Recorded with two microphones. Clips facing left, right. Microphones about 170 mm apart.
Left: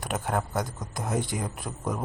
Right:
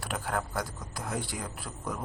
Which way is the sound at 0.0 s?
20° left (ahead or behind).